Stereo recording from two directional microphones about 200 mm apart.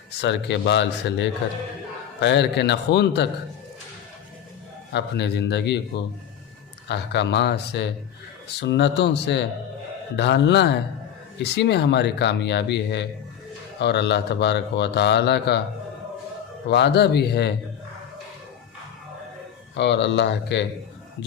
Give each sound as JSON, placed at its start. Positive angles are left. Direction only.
{"t": 0.2, "sound": "a man's voice", "side_deg": 60}
{"t": 4.9, "sound": "a man's voice", "side_deg": 60}
{"t": 6.8, "sound": "a man's voice", "side_deg": 60}
{"t": 16.6, "sound": "a man's voice", "side_deg": 55}
{"t": 19.7, "sound": "a man's voice", "side_deg": 60}